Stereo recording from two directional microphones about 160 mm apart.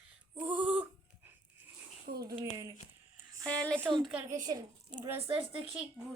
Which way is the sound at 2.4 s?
20° right (ahead or behind).